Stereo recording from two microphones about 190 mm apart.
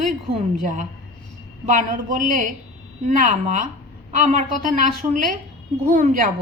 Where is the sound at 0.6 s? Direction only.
45° right (ahead or behind).